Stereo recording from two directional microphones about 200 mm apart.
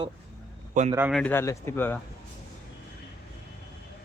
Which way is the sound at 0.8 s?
40° right (ahead or behind).